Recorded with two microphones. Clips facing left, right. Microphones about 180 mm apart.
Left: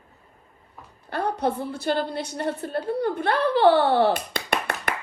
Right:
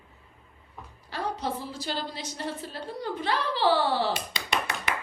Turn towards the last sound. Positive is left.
turn(degrees=60)  # may be behind; listen again after turning